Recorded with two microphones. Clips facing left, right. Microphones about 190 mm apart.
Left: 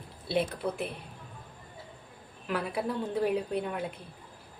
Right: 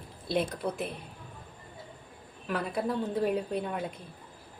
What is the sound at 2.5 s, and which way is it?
Speech, 10° left (ahead or behind).